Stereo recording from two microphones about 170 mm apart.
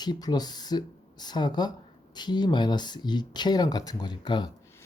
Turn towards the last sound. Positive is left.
turn(degrees=25)  # may be behind; listen again after turning